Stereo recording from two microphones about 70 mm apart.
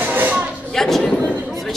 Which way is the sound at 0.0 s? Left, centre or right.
Right.